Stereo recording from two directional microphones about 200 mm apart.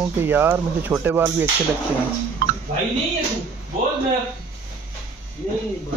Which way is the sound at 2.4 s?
45° right (ahead or behind).